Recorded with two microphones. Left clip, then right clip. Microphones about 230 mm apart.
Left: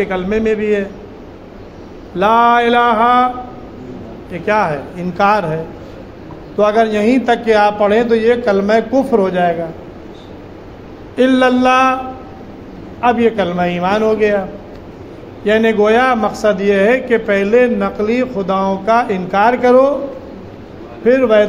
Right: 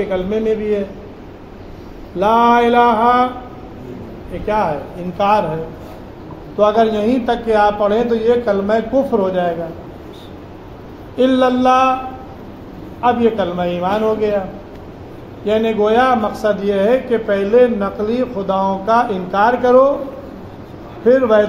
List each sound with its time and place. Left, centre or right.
0.1 s a man's voice: left
2.1 s a man's voice: left
5.1 s a man's voice: left
6.5 s a man's voice: left
11.1 s a man's voice: left
13.0 s a man's voice: left
15.4 s a man's voice: left
21.1 s a man's voice: left